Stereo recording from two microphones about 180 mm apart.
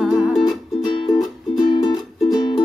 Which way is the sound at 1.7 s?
25° left (ahead or behind).